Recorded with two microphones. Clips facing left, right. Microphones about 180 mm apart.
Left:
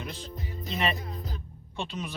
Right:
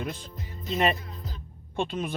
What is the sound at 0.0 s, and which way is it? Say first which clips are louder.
Music: right 4 dB; 50° right (ahead or behind).